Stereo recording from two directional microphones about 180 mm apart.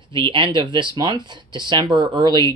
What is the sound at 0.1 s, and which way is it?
Speech, 25° right (ahead or behind).